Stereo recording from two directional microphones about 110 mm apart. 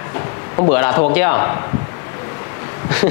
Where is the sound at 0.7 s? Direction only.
25° left (ahead or behind).